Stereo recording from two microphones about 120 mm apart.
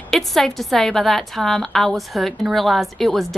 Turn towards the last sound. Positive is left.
turn(degrees=0)  # may be behind; listen again after turning